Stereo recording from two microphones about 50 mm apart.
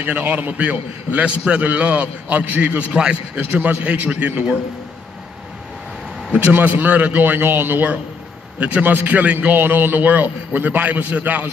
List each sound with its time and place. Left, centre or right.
0.0 s a man's voice: right
3.3 s a man's voice: right
6.4 s a man's voice: right
7.2 s a man's voice: right
8.5 s a man's voice: right
9.6 s a man's voice: right